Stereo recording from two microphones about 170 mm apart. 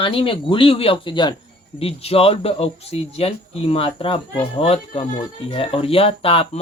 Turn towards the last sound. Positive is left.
turn(degrees=35)  # may be behind; listen again after turning